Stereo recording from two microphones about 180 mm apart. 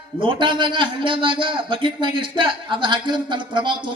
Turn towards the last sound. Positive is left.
turn(degrees=-25)  # may be behind; listen again after turning